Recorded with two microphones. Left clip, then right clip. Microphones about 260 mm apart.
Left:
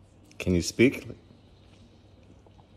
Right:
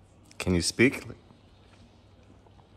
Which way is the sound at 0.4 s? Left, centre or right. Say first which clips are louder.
Left 1 dB; centre.